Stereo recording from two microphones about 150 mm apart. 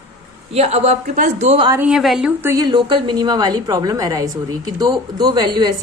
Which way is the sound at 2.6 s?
30° right (ahead or behind).